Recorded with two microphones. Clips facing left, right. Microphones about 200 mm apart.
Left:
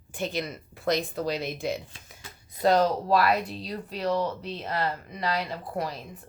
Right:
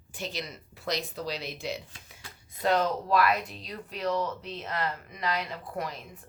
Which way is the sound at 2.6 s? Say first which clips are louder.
Left 4 dB; 35° left (ahead or behind).